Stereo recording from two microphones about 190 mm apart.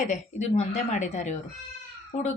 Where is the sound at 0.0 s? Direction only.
40° left (ahead or behind).